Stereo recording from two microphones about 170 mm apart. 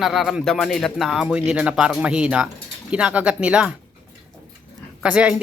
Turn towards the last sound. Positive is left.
turn(degrees=-5)  # may be behind; listen again after turning